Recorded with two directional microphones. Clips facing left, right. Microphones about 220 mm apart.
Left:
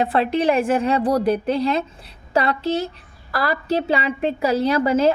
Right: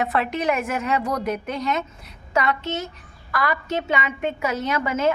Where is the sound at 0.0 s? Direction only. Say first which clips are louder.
Left 4 dB; 30° left (ahead or behind).